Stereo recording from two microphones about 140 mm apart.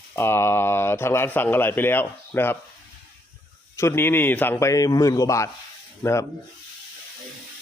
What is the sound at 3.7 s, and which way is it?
A man's voice, 20° left (ahead or behind).